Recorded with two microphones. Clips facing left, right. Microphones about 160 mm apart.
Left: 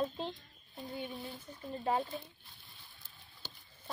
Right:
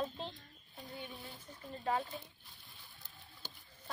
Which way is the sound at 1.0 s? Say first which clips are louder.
Left 7 dB; 20° left (ahead or behind).